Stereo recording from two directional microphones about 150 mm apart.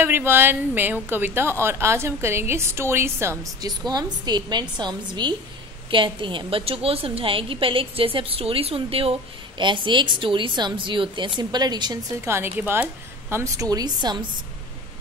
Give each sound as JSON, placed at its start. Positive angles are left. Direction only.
{"t": 0.0, "sound": "a woman's voice", "side_deg": -15}
{"t": 12.3, "sound": "speech", "side_deg": -15}